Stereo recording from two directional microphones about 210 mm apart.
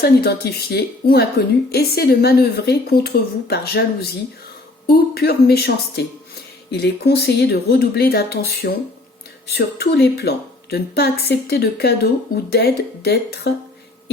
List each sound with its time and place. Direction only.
0.0 s a woman's voice: 50° left (ahead or behind)